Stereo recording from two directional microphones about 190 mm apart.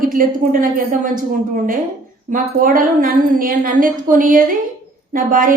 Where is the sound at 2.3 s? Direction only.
45° right (ahead or behind).